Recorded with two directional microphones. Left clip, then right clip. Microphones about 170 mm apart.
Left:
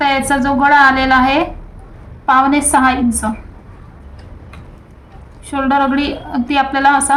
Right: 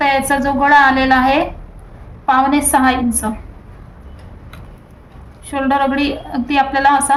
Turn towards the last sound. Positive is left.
turn(degrees=-10)  # may be behind; listen again after turning